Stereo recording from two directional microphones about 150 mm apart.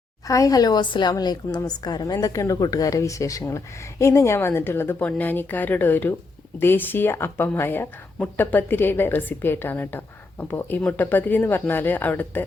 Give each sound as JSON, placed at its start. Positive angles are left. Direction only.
{"t": 0.3, "sound": "a woman's voice", "side_deg": 20}